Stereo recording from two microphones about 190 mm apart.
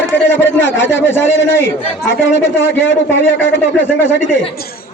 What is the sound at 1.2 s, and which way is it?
A man's voice, 75° left (ahead or behind).